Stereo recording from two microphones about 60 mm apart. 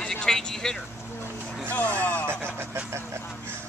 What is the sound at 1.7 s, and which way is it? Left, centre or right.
Speech, left.